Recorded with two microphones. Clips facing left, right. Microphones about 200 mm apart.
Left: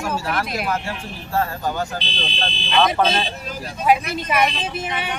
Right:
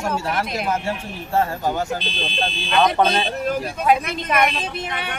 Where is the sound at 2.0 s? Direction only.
50° right (ahead or behind).